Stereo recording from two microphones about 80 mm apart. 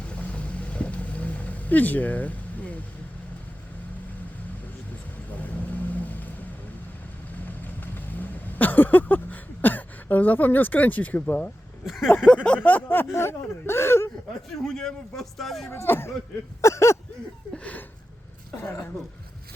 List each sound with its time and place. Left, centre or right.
0.1 s vehicle: centre
5.4 s vehicle: left
7.4 s vehicle: left
12.0 s speech: left
12.3 s a sound: centre
12.6 s speech: left
14.5 s speech: centre
15.7 s speech: left
16.6 s a sound: left
17.5 s a sound: centre